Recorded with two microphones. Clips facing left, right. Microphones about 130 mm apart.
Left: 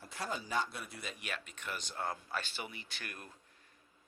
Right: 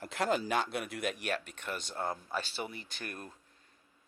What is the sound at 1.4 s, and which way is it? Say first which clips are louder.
Speech: right 3 dB; 60° right (ahead or behind).